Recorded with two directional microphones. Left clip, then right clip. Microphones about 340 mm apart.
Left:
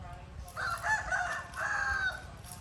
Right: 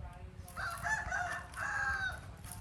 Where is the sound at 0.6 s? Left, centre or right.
Left.